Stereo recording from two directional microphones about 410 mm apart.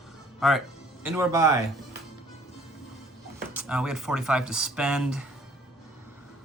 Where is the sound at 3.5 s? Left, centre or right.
Centre.